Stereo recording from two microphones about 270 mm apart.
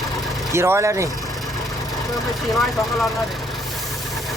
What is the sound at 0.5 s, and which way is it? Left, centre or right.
Speech, centre.